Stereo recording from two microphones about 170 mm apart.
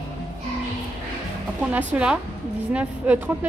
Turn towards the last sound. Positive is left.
turn(degrees=-10)  # may be behind; listen again after turning